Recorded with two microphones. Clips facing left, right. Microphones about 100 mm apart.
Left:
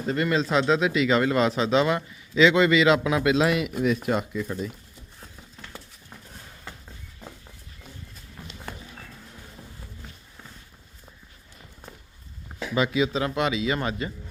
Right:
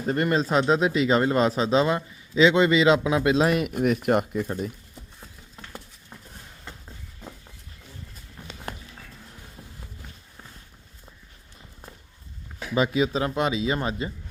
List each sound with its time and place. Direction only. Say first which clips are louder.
0.0 s a man's voice: right 1 dB; 45° right (ahead or behind)
12.7 s a man's voice: right 1 dB; 40° right (ahead or behind)